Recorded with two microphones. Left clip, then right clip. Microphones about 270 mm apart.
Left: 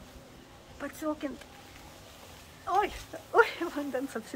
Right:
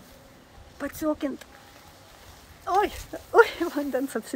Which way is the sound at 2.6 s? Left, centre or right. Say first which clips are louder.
Right 4 dB; right.